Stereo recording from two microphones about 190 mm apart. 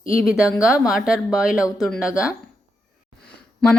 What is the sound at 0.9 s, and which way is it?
Speech, 5° right (ahead or behind).